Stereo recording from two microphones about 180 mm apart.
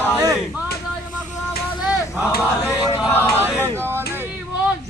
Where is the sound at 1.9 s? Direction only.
20° left (ahead or behind).